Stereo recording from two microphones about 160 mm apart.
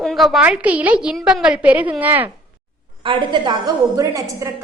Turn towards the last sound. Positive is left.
turn(degrees=-20)  # may be behind; listen again after turning